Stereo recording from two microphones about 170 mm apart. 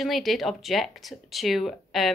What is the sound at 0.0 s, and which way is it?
Speech, centre (ahead or behind).